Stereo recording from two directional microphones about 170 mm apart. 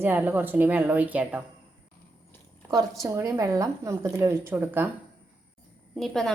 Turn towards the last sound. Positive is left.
turn(degrees=0)  # may be behind; listen again after turning